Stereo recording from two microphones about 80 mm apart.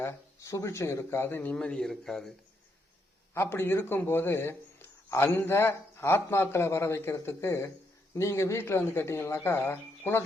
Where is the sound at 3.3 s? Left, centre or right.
Left.